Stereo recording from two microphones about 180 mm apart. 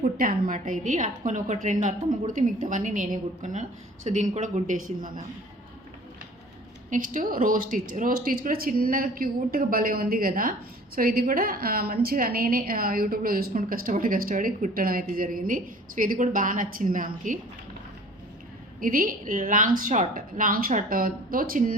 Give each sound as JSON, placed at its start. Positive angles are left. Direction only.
{"t": 0.0, "sound": "a woman's voice", "side_deg": -50}
{"t": 6.9, "sound": "a woman's voice", "side_deg": -45}
{"t": 18.8, "sound": "a woman's voice", "side_deg": -50}